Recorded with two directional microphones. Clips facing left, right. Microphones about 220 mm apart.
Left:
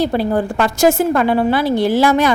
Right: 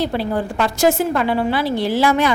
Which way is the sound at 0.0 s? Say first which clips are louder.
Left 4 dB; 45° left (ahead or behind).